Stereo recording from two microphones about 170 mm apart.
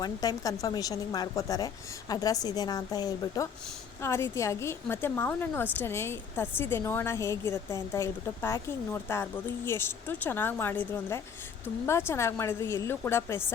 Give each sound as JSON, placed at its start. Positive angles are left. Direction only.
{"t": 0.0, "sound": "a woman's voice", "side_deg": 20}